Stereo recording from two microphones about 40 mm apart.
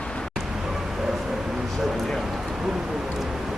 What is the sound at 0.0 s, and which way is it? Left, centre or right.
Vehicle, left.